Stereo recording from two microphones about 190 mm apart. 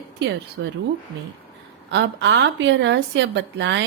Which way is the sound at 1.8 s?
70° right (ahead or behind).